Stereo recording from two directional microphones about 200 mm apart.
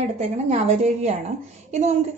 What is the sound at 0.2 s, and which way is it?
A woman's voice, 35° right (ahead or behind).